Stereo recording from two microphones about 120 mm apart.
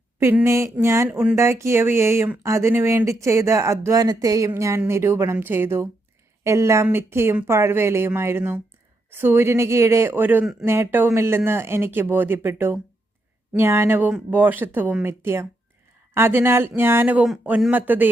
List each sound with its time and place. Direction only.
0.2 s speech: 20° right (ahead or behind)